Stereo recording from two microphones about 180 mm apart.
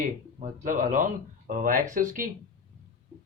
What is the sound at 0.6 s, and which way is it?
Speech, 45° right (ahead or behind).